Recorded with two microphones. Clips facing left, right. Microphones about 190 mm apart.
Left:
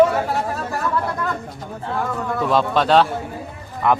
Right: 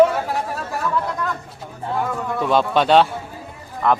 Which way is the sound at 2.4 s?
Centre (ahead or behind).